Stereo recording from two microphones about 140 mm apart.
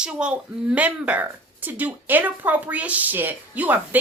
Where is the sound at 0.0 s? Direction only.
5° right (ahead or behind).